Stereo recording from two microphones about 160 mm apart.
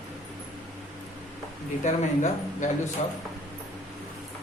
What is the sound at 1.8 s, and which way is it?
Speech, 50° left (ahead or behind).